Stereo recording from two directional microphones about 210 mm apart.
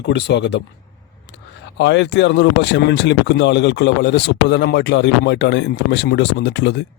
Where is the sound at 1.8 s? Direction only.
55° left (ahead or behind).